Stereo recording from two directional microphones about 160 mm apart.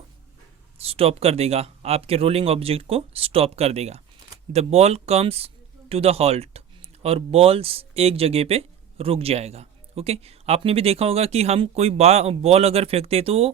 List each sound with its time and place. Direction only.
0.9 s speech: 40° right (ahead or behind)